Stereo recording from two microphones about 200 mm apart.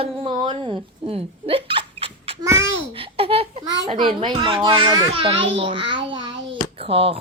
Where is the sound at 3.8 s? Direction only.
30° right (ahead or behind).